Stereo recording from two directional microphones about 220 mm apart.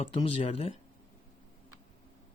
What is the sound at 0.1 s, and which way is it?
Speech, 25° left (ahead or behind).